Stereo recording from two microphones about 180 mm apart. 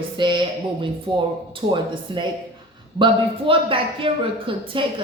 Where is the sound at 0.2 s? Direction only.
25° right (ahead or behind).